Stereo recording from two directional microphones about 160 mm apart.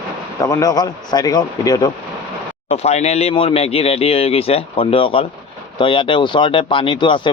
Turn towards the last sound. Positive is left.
turn(degrees=30)  # may be behind; listen again after turning